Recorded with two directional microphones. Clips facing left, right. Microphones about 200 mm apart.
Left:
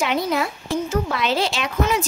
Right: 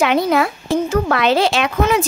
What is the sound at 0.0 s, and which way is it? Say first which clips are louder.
A woman's voice: right 6 dB; 65° right (ahead or behind).